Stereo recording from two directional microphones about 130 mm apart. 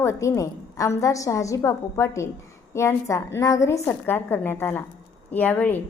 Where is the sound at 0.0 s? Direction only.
25° left (ahead or behind).